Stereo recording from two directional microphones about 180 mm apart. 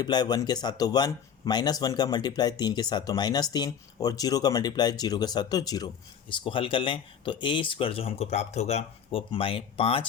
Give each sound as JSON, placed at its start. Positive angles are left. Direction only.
{"t": 0.0, "sound": "speech", "side_deg": 25}